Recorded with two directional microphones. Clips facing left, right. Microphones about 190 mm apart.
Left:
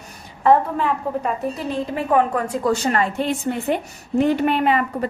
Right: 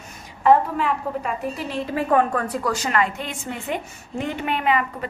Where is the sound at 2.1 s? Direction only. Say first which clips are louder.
Left 2 dB; 10° left (ahead or behind).